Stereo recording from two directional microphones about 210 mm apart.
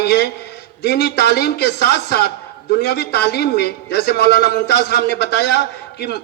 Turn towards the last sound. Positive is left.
turn(degrees=50)  # may be behind; listen again after turning